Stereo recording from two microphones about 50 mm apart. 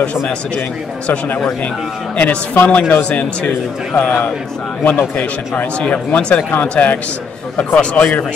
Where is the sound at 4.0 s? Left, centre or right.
Left.